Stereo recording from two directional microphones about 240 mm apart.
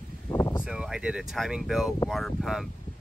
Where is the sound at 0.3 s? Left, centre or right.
Centre.